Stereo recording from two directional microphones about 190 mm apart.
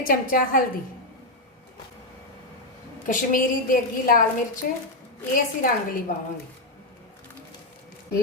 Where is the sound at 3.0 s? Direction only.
45° left (ahead or behind).